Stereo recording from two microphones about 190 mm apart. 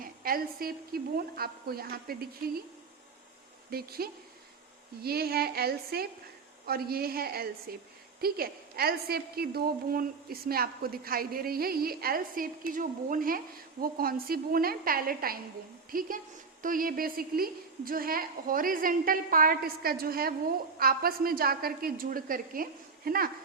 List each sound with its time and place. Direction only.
0.0 s a woman's voice: 50° right (ahead or behind)
3.7 s a woman's voice: 50° right (ahead or behind)